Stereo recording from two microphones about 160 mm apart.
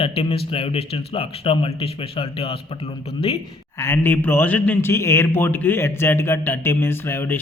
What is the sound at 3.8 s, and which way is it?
A man's voice, 15° left (ahead or behind).